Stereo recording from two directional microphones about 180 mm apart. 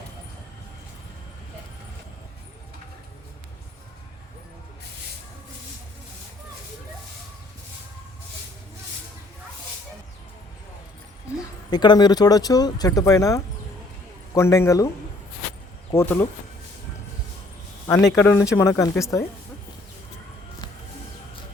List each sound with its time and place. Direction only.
11.7 s speech: 25° left (ahead or behind)
15.9 s speech: 15° left (ahead or behind)
17.8 s speech: 15° left (ahead or behind)